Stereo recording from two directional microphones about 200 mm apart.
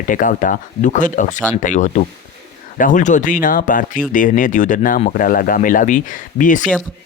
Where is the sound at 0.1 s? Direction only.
40° left (ahead or behind).